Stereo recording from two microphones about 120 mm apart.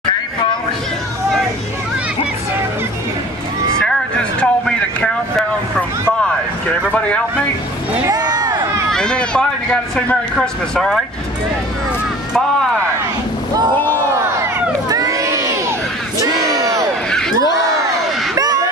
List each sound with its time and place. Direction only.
3.7 s vehicle: 5° left (ahead or behind)
8.1 s a sound: 35° right (ahead or behind)
8.9 s run: 5° left (ahead or behind)
9.9 s speech: 5° left (ahead or behind)
13.7 s speech: 15° left (ahead or behind)
14.3 s crowd: 30° right (ahead or behind)
18.3 s a sound: 30° right (ahead or behind)